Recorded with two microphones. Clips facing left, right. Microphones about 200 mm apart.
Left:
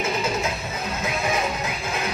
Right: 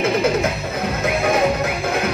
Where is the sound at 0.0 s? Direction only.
60° right (ahead or behind).